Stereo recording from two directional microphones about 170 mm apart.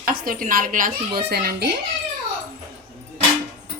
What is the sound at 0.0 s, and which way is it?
A woman's voice, 55° right (ahead or behind).